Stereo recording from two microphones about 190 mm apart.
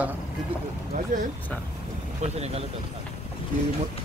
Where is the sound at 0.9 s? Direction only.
40° right (ahead or behind).